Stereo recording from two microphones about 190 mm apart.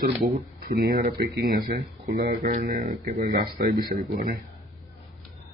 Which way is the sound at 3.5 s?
45° right (ahead or behind).